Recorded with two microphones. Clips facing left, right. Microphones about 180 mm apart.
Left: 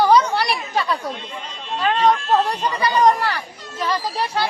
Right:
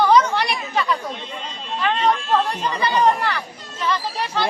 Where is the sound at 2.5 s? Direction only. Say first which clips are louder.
Left 1 dB; 35° left (ahead or behind).